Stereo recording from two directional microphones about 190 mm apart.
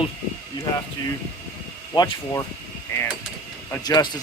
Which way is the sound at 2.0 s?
20° left (ahead or behind).